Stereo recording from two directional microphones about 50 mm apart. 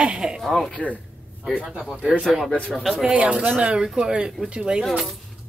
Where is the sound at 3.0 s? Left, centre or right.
Right.